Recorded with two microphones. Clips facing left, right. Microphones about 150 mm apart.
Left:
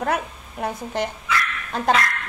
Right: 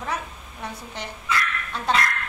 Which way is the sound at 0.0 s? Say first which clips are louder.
Left 6 dB; 55° left (ahead or behind).